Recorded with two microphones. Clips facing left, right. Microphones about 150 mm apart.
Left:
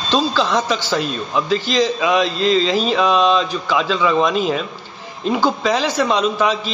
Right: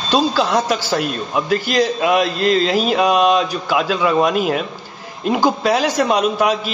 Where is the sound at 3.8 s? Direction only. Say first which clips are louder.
Even; 45° right (ahead or behind).